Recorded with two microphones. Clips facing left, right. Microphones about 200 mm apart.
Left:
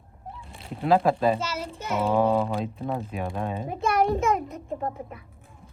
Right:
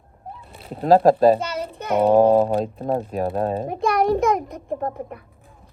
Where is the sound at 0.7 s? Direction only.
35° right (ahead or behind).